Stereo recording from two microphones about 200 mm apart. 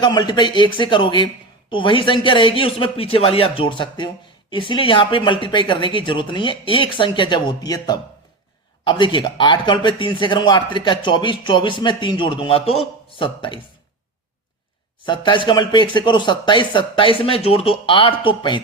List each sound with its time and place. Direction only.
0.0 s speech: 20° left (ahead or behind)
15.0 s speech: 25° left (ahead or behind)